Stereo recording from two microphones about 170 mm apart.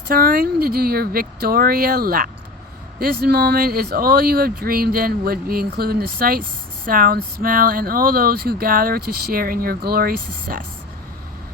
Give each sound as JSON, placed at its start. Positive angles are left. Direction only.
{"t": 0.1, "sound": "speech", "side_deg": -60}